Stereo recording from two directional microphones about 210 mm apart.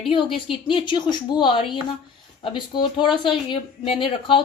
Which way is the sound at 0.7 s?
25° left (ahead or behind).